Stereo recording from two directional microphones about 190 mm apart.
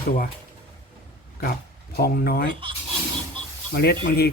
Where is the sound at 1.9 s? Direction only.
55° left (ahead or behind).